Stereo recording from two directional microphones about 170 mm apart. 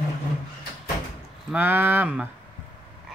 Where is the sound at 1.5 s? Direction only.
10° right (ahead or behind).